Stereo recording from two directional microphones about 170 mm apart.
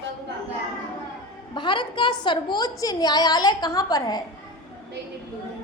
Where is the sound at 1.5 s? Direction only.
30° left (ahead or behind).